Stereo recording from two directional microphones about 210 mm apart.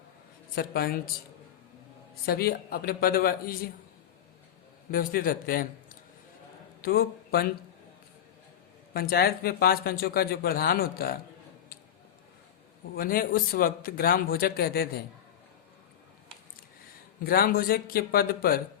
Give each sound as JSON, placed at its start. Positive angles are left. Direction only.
{"t": 0.5, "sound": "speech", "side_deg": 45}
{"t": 2.2, "sound": "speech", "side_deg": 45}
{"t": 4.9, "sound": "speech", "side_deg": 45}
{"t": 8.9, "sound": "speech", "side_deg": 45}
{"t": 13.0, "sound": "speech", "side_deg": 45}
{"t": 17.2, "sound": "speech", "side_deg": 45}